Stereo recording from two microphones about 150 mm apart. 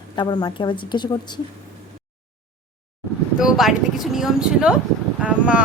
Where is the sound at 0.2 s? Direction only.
30° left (ahead or behind).